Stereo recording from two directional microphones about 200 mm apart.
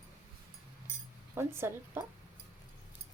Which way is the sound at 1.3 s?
10° right (ahead or behind).